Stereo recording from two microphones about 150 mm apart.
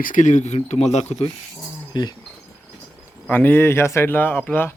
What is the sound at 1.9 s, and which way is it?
Speech, 30° left (ahead or behind).